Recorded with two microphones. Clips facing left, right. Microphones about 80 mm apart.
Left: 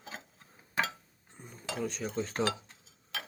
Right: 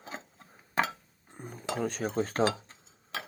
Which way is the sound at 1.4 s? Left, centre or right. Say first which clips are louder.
Right 7 dB; right.